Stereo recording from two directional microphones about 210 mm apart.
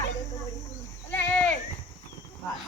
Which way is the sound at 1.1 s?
10° left (ahead or behind).